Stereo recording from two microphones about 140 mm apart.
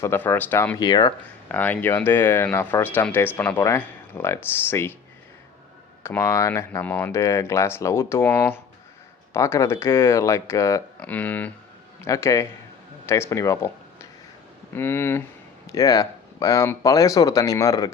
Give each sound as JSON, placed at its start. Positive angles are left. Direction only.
{"t": 0.0, "sound": "speech", "side_deg": 20}
{"t": 0.8, "sound": "speech", "side_deg": 30}
{"t": 1.5, "sound": "speech", "side_deg": 10}
{"t": 6.0, "sound": "speech", "side_deg": 15}